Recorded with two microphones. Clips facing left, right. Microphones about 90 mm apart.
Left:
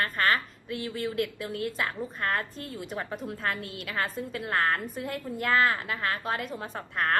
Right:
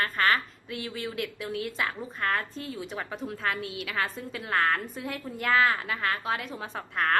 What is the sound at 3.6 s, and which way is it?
Speech, 45° left (ahead or behind).